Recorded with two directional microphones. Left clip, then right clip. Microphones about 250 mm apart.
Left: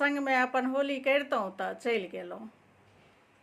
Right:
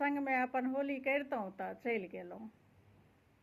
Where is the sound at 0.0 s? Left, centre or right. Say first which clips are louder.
Left 7 dB; centre.